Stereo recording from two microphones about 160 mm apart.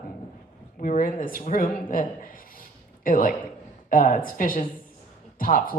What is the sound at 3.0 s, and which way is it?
Speech, 60° left (ahead or behind).